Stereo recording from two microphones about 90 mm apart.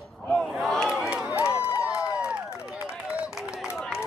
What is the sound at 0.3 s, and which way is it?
Battle cry, 5° left (ahead or behind).